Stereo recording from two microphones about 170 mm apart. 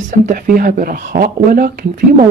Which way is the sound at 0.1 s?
55° right (ahead or behind).